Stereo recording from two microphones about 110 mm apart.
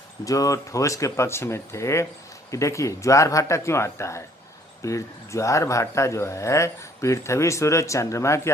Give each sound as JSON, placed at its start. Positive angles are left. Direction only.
{"t": 0.3, "sound": "speech", "side_deg": 30}